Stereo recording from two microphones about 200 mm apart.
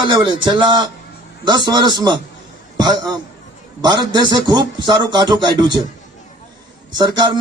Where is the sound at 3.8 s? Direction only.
20° right (ahead or behind).